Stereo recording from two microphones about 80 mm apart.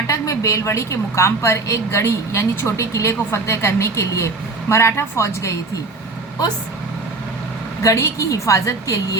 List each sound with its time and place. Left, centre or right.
0.1 s a woman's voice: left
7.8 s a woman's voice: left